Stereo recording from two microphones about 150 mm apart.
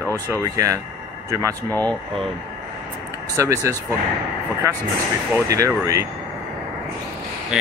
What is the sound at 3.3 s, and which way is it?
Speech, 20° right (ahead or behind).